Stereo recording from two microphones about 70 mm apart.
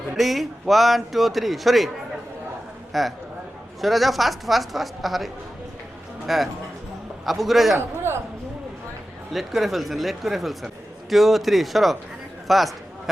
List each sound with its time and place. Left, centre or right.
0.2 s a woman's voice: centre
2.9 s a woman's voice: centre
7.8 s a sound: right
9.3 s a woman's voice: centre